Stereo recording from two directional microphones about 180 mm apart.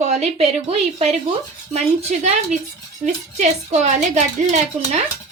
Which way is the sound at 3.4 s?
40° right (ahead or behind).